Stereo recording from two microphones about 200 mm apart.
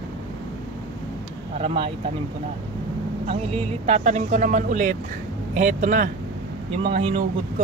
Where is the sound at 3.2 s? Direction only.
30° right (ahead or behind).